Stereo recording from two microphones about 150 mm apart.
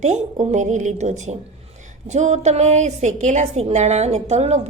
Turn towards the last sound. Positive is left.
turn(degrees=-45)  # may be behind; listen again after turning